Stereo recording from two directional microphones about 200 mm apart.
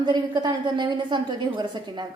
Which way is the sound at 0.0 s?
20° right (ahead or behind).